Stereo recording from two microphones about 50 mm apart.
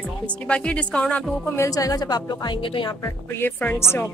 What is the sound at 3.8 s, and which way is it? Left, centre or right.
Speech, left.